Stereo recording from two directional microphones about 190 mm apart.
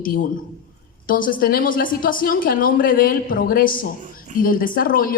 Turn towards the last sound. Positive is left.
turn(degrees=50)  # may be behind; listen again after turning